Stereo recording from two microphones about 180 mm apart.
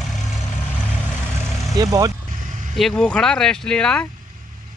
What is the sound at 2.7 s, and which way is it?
Speech, centre (ahead or behind).